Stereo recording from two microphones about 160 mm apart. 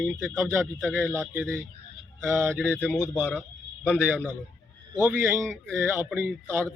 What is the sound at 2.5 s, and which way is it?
Speech, 5° left (ahead or behind).